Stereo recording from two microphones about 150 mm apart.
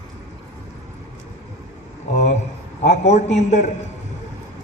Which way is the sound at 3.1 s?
50° left (ahead or behind).